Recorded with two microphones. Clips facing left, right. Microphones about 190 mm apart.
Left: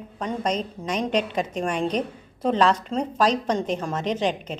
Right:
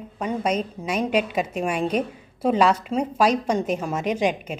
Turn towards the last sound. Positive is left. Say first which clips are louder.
# right 2 dB
turn(degrees=-10)  # may be behind; listen again after turning